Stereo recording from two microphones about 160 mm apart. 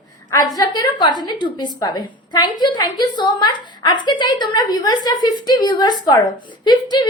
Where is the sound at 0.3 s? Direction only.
25° left (ahead or behind).